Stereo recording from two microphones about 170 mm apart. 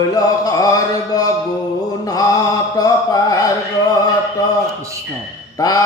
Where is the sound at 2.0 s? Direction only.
20° left (ahead or behind).